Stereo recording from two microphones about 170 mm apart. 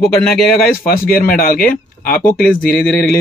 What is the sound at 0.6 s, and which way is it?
Speech, 60° left (ahead or behind).